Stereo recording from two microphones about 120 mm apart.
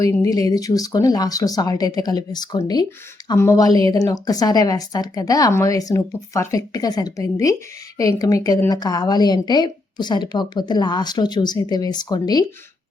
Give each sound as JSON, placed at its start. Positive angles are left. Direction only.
{"t": 0.0, "sound": "a woman's voice", "side_deg": 30}